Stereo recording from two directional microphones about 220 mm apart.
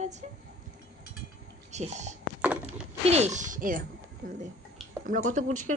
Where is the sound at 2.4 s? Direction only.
5° right (ahead or behind).